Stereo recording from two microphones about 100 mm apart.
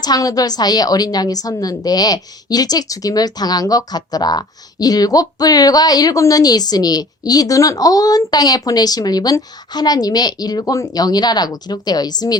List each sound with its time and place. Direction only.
0.0 s a woman's voice: 40° left (ahead or behind)